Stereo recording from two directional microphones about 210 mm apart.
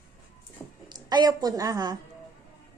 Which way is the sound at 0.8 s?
20° right (ahead or behind).